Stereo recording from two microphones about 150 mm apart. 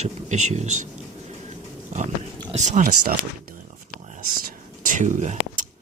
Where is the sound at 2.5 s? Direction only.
50° right (ahead or behind).